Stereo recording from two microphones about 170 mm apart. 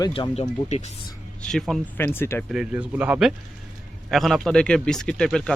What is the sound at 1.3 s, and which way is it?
Speech, 5° left (ahead or behind).